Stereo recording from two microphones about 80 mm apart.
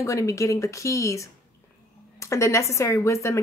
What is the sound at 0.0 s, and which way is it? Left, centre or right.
A woman's voice, left.